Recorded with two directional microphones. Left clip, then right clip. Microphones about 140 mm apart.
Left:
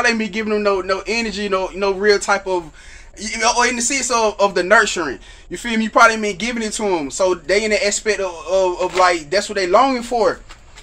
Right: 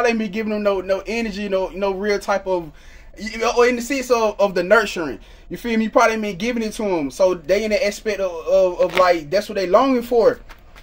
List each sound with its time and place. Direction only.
0.0 s a man's voice: 25° right (ahead or behind)
3.2 s speech: 40° right (ahead or behind)